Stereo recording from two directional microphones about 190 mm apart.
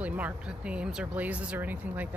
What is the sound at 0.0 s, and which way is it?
Speech, 5° right (ahead or behind).